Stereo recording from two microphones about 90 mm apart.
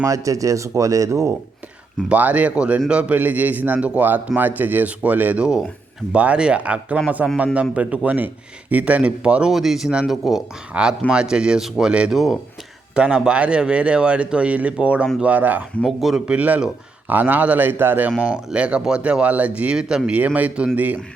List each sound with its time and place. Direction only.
0.0 s speech: 40° right (ahead or behind)
2.0 s a man's voice: 15° right (ahead or behind)
15.8 s a man's voice: centre (ahead or behind); by 18.1 s 25° right (ahead or behind)
18.2 s a man's voice: 10° right (ahead or behind)